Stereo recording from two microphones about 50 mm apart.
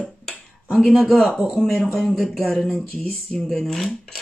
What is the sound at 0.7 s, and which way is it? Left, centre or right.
Speech, centre.